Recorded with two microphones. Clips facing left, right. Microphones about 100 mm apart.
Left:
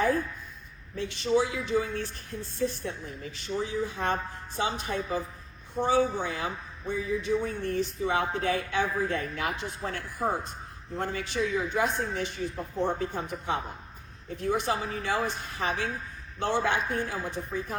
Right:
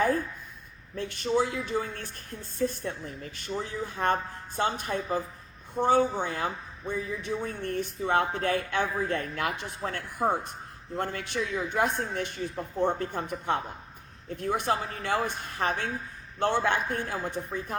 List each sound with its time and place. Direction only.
0.9 s a man's voice: 50° right (ahead or behind)